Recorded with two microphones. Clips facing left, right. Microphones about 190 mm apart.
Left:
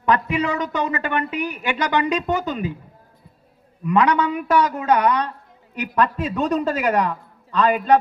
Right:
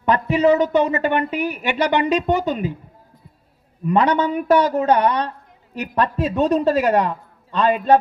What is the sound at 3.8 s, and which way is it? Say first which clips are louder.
A man's voice: right 1 dB; 30° right (ahead or behind).